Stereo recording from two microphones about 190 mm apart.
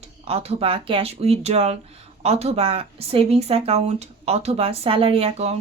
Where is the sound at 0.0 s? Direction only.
30° right (ahead or behind).